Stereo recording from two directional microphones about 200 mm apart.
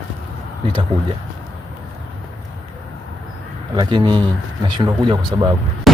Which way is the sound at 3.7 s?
20° right (ahead or behind).